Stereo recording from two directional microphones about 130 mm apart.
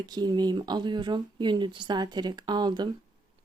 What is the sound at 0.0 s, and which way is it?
Speech, 35° right (ahead or behind).